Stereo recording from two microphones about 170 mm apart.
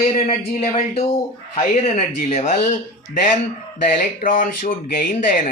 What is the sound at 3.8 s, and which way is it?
Speech, 50° left (ahead or behind).